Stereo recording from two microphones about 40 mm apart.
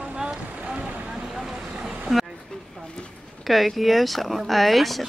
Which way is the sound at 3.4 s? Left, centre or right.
Centre.